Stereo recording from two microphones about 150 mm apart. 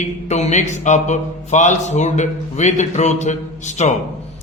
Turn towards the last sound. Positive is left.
turn(degrees=50)  # may be behind; listen again after turning